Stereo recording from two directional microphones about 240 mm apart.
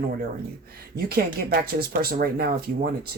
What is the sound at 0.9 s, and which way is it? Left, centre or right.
Speech, right.